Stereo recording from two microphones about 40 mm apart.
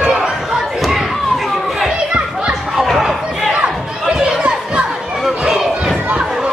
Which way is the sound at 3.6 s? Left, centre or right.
Right.